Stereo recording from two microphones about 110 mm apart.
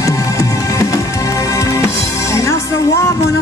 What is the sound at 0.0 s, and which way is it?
Music, 30° left (ahead or behind).